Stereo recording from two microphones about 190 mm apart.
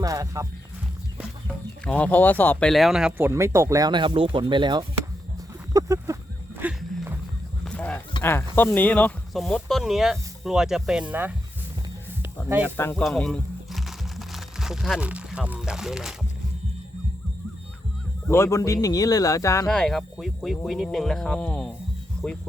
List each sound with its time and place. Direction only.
0.0 s speech: 20° right (ahead or behind)
1.8 s speech: 5° left (ahead or behind); by 6.1 s 15° right (ahead or behind)
6.6 s music: 10° right (ahead or behind)
7.6 s honk: 5° left (ahead or behind)
8.2 s speech: 10° left (ahead or behind); by 11.3 s 10° right (ahead or behind)
12.7 s speech: 10° left (ahead or behind)
13.1 s music: 5° left (ahead or behind)
18.3 s speech: 15° left (ahead or behind)
19.6 s speech: 5° left (ahead or behind)